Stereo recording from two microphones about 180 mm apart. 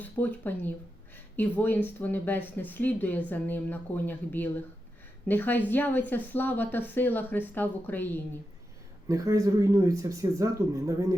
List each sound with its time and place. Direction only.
0.0 s speech: 10° left (ahead or behind)
9.0 s speech: 20° right (ahead or behind)